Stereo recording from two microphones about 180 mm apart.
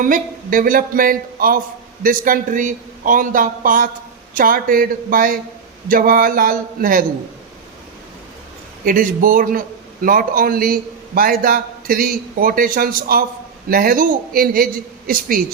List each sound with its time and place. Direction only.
0.0 s a man's voice: 50° right (ahead or behind)
8.8 s a man's voice: 50° right (ahead or behind)